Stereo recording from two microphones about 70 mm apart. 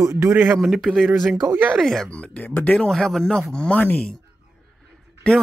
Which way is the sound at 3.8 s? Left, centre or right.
Left.